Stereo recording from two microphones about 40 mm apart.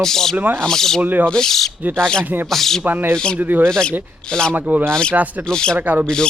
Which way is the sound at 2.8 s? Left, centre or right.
Right.